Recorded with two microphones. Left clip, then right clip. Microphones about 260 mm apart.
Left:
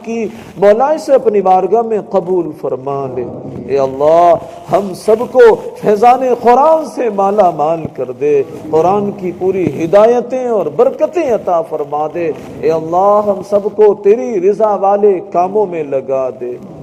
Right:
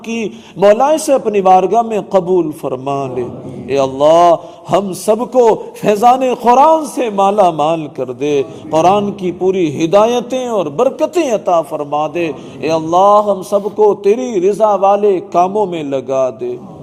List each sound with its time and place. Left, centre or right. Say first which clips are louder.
0.1 s a man's voice: left 2 dB; right
3.7 s a man's voice: left 1 dB; right
4.0 s a man's voice: even; right
11.3 s a man's voice: even; right
12.7 s a man's voice: right 2 dB; right